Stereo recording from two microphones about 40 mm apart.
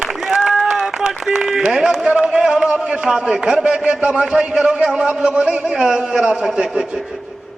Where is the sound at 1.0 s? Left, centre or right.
Centre.